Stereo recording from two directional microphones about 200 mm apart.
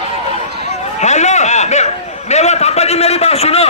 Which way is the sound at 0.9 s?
35° left (ahead or behind).